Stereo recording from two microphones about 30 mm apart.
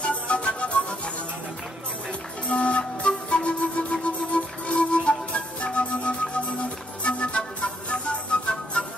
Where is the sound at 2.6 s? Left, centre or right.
Left.